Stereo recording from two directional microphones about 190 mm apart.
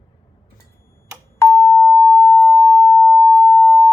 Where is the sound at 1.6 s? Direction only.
10° left (ahead or behind).